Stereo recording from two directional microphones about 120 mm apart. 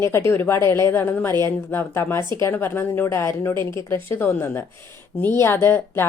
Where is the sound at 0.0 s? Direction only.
20° left (ahead or behind).